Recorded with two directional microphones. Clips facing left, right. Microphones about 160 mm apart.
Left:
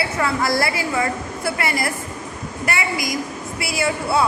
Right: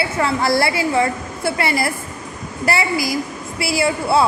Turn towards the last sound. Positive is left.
turn(degrees=-30)  # may be behind; listen again after turning